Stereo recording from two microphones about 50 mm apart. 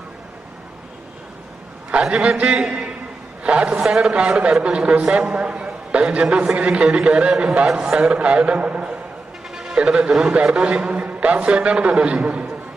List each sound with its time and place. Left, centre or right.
1.9 s a man's voice: right
9.6 s a man's voice: centre